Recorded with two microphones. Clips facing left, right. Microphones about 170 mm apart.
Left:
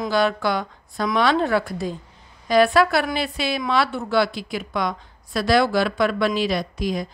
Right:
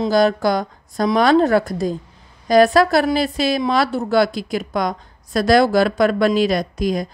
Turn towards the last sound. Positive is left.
turn(degrees=-45)  # may be behind; listen again after turning